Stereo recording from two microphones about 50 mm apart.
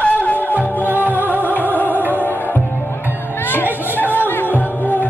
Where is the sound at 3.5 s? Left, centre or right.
Left.